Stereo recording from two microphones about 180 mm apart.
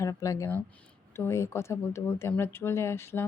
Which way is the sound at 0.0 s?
15° left (ahead or behind).